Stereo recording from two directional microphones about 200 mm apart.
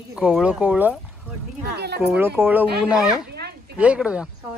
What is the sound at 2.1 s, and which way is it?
A man's voice, 10° right (ahead or behind).